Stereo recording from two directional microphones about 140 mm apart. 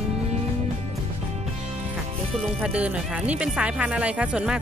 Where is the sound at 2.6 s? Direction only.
10° right (ahead or behind).